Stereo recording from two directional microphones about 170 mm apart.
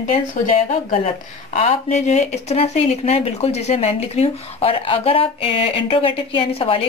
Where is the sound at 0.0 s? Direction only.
45° left (ahead or behind).